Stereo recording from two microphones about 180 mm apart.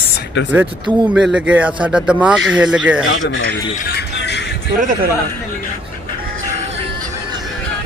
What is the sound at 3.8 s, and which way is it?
Music, 70° left (ahead or behind).